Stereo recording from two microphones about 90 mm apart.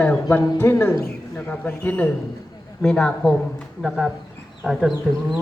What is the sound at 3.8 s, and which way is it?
Speech, 5° right (ahead or behind).